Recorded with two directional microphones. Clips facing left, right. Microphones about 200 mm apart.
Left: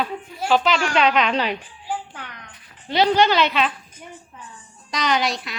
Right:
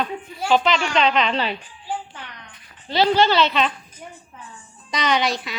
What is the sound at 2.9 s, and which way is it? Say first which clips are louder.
Speech: even; 15° left (ahead or behind).